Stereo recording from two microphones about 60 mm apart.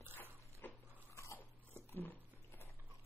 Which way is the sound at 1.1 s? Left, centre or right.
Left.